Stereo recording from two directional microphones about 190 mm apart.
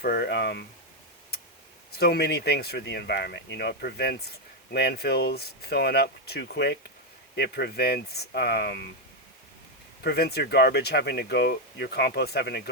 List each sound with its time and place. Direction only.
0.0 s speech: 55° left (ahead or behind)
2.0 s speech: 55° left (ahead or behind)
10.0 s speech: 55° left (ahead or behind)